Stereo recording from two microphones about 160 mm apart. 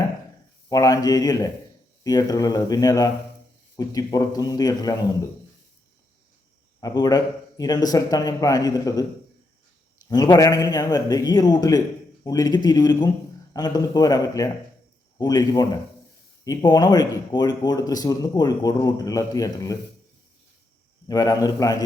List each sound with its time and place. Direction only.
0.7 s speech: 20° left (ahead or behind)
6.7 s speech: 25° left (ahead or behind)
10.1 s speech: 25° left (ahead or behind)
21.1 s speech: 25° left (ahead or behind)